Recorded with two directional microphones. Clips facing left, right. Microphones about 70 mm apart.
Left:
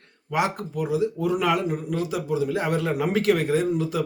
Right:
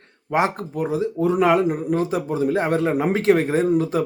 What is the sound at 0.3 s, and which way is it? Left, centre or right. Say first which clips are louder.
Speech: right 4 dB; right.